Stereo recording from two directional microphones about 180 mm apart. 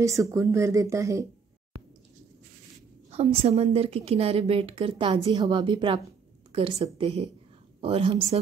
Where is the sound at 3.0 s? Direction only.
35° right (ahead or behind).